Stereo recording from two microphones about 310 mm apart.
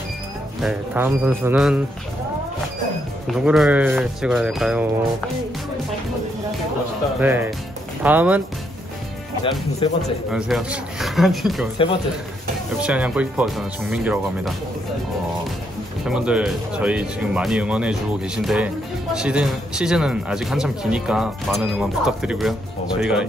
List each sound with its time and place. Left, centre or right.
0.6 s speech: centre
3.3 s speech: centre
7.2 s speech: centre
9.4 s speech: centre
10.3 s speech: centre
12.8 s speech: centre
16.1 s speech: centre